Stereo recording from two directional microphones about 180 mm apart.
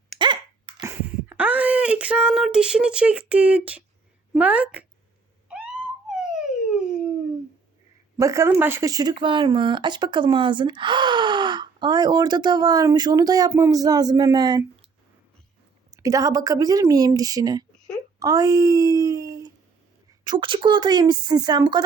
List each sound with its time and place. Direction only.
0.8 s speech: 15° right (ahead or behind)
5.5 s a sound: 5° right (ahead or behind)
8.2 s speech: 15° right (ahead or behind)
15.9 s speech: 20° right (ahead or behind)